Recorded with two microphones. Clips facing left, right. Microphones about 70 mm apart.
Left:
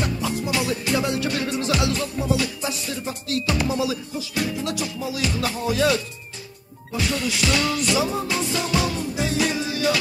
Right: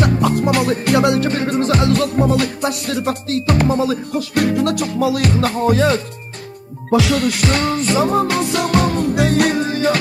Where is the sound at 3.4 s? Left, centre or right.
Right.